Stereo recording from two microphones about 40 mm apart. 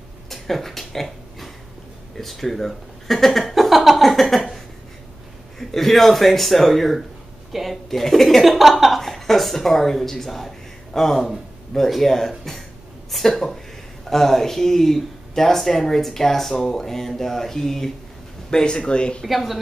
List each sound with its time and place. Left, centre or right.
0.3 s a sound: centre
2.1 s speech: centre
5.6 s speech: centre
18.5 s speech: centre
19.2 s speech: centre